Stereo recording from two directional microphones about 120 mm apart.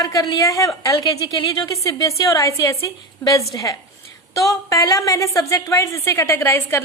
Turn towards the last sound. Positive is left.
turn(degrees=20)  # may be behind; listen again after turning